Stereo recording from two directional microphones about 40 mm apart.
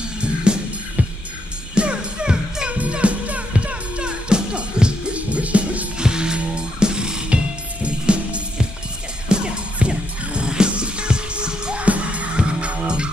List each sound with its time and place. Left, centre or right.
0.2 s music: right
1.8 s music: right
2.7 s music: right
5.9 s music: right